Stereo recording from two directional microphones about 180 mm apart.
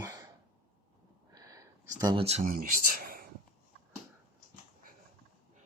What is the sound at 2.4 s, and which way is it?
Speech, 55° right (ahead or behind).